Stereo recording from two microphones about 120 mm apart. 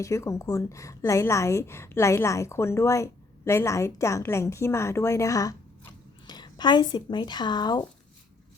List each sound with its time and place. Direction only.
0.0 s a woman's voice: 25° left (ahead or behind)